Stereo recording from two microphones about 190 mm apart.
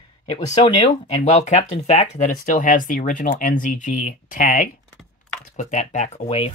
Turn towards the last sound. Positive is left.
turn(degrees=30)  # may be behind; listen again after turning